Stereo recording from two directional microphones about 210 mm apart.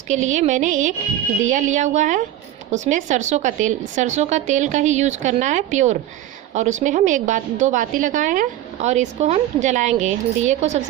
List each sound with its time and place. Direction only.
0.1 s a woman's voice: 35° right (ahead or behind)